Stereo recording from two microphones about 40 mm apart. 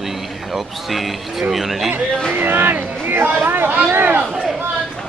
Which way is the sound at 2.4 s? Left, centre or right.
Right.